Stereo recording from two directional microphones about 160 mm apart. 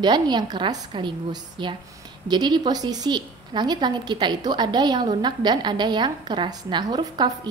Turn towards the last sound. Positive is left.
turn(degrees=-25)  # may be behind; listen again after turning